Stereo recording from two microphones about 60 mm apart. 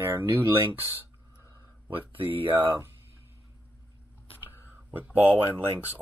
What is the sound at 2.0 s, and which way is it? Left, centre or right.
Speech, right.